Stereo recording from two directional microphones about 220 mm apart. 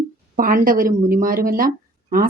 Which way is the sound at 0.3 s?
40° right (ahead or behind).